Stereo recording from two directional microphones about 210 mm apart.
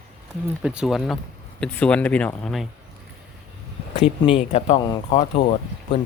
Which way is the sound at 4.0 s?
30° left (ahead or behind).